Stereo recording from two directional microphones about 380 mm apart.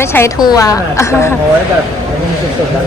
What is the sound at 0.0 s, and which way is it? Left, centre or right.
A woman's voice, centre.